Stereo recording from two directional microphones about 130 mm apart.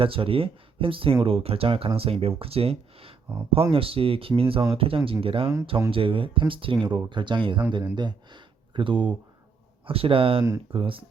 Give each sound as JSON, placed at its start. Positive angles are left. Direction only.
{"t": 0.0, "sound": "speech", "side_deg": -45}